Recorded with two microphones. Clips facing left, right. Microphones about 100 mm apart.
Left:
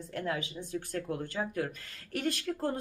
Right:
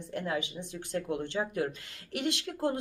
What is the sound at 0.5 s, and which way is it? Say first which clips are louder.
Speech: even; 20° right (ahead or behind).